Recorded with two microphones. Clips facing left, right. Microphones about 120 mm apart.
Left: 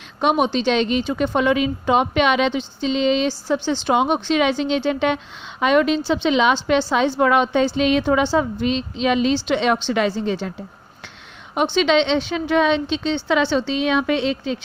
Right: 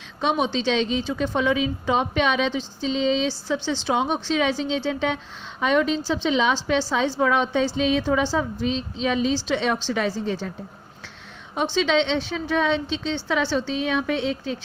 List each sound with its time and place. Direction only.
0.2 s a woman's voice: 60° left (ahead or behind)
3.2 s a woman's voice: 55° left (ahead or behind); by 10.5 s 70° left (ahead or behind)
11.5 s a woman's voice: 65° left (ahead or behind)